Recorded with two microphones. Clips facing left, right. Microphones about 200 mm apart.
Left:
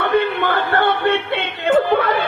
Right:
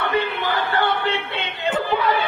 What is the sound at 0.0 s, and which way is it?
Music, 60° left (ahead or behind).